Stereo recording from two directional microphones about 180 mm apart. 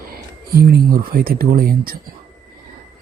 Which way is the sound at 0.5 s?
55° right (ahead or behind).